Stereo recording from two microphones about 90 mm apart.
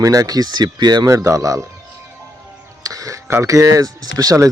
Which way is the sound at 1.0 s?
35° right (ahead or behind).